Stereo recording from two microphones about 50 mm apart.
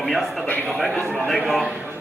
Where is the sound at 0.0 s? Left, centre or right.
Centre.